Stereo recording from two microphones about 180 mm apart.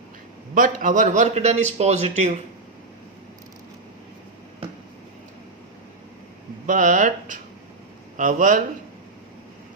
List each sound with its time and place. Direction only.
0.5 s a man's voice: 50° right (ahead or behind)
6.7 s speech: 45° right (ahead or behind)